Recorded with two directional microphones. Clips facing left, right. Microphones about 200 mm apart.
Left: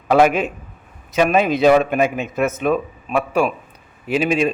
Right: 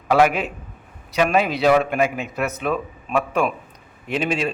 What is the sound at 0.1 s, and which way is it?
A man's voice, 20° left (ahead or behind).